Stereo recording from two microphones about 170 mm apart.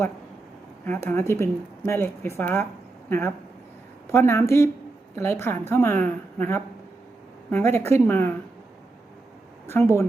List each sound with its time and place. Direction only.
0.9 s a woman's voice: 15° left (ahead or behind)
9.6 s a woman's voice: 15° left (ahead or behind)